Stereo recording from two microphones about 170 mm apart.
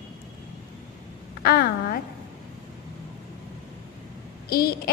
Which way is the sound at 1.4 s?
65° left (ahead or behind).